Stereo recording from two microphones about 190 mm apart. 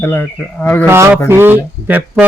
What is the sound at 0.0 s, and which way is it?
Speech, 10° left (ahead or behind).